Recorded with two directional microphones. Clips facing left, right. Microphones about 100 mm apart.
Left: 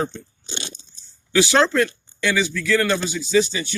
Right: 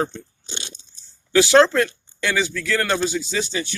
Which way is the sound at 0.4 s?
65° left (ahead or behind).